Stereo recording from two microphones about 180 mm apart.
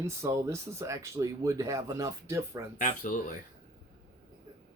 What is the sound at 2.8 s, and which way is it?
Speech, 45° left (ahead or behind).